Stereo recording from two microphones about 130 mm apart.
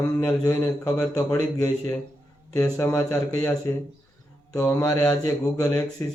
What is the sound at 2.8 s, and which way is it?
Speech, 20° left (ahead or behind).